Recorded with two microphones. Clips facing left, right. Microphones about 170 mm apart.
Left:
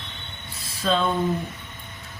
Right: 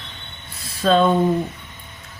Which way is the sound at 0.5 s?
65° right (ahead or behind).